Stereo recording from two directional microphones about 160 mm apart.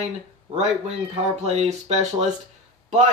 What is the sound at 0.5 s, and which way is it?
Speech, 45° right (ahead or behind).